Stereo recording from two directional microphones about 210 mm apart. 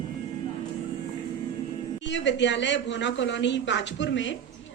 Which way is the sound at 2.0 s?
60° left (ahead or behind).